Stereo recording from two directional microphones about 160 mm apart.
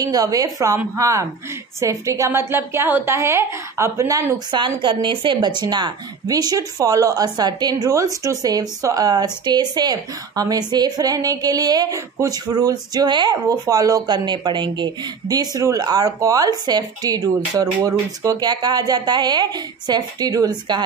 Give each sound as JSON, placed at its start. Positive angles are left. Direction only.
{"t": 0.0, "sound": "a woman's voice", "side_deg": -25}